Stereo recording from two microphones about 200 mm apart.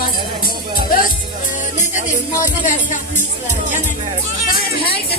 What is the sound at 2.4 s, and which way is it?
Music, 40° left (ahead or behind).